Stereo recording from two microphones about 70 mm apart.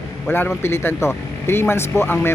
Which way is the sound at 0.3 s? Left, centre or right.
Left.